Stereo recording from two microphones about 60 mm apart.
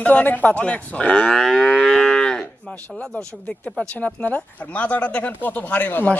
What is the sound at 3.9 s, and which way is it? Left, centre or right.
Speech, left.